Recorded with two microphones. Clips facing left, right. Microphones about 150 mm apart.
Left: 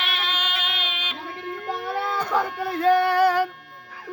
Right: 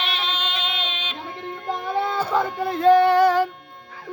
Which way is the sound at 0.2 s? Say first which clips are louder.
Right 1 dB; 5° left (ahead or behind).